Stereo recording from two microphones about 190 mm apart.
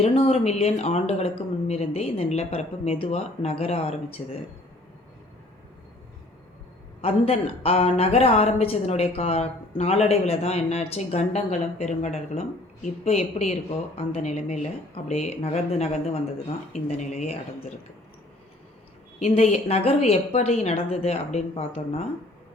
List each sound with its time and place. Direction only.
0.0 s speech: 30° left (ahead or behind)
7.0 s speech: 30° left (ahead or behind)
19.2 s speech: 35° left (ahead or behind)